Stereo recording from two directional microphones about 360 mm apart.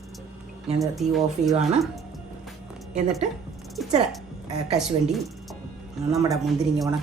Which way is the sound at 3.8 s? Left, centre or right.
Centre.